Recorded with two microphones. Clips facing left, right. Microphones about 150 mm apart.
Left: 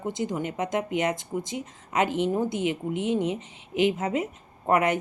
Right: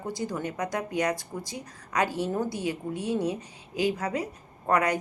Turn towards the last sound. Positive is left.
turn(degrees=25)  # may be behind; listen again after turning